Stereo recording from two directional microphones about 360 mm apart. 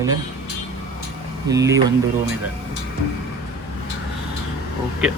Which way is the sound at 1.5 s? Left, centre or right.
Centre.